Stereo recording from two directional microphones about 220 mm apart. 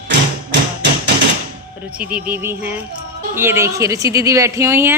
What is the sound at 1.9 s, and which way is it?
Speech, 5° right (ahead or behind).